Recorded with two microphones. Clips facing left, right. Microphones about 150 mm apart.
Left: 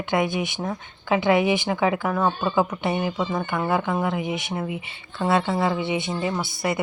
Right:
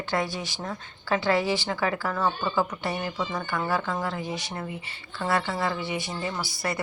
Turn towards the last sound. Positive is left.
turn(degrees=20)  # may be behind; listen again after turning